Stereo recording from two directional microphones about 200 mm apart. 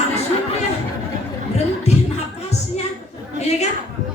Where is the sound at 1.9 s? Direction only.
35° left (ahead or behind).